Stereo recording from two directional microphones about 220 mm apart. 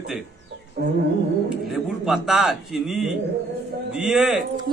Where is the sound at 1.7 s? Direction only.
Centre (ahead or behind).